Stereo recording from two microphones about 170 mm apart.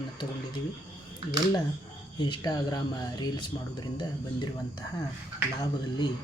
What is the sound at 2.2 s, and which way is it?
Speech, 25° left (ahead or behind).